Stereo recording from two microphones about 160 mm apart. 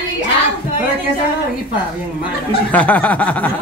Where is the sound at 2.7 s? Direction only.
10° left (ahead or behind).